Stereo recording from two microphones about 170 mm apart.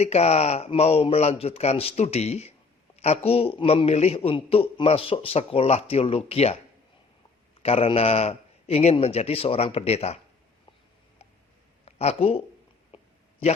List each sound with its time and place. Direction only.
0.0 s a man's voice: 40° left (ahead or behind)
7.6 s a man's voice: 35° left (ahead or behind)
11.9 s speech: 35° left (ahead or behind)